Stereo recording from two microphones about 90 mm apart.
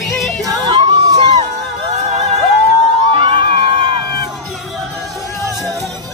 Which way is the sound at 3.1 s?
75° right (ahead or behind).